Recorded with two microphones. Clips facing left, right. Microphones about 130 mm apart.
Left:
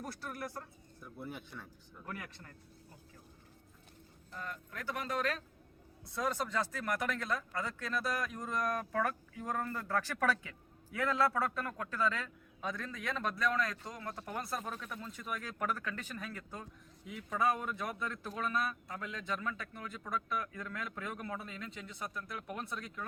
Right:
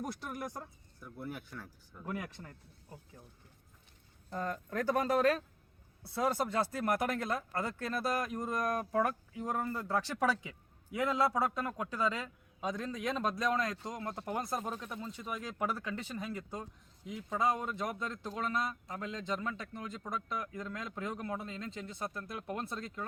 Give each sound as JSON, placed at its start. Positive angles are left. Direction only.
{"t": 0.0, "sound": "a man's voice", "side_deg": -15}
{"t": 0.9, "sound": "speech", "side_deg": 0}
{"t": 2.0, "sound": "speech", "side_deg": -20}
{"t": 4.3, "sound": "a man's voice", "side_deg": -40}
{"t": 17.2, "sound": "speech", "side_deg": -25}